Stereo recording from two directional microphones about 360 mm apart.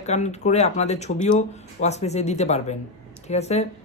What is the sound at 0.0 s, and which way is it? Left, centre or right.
Speech, centre.